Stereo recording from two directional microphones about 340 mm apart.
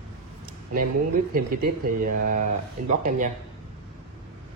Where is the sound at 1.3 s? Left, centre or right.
Right.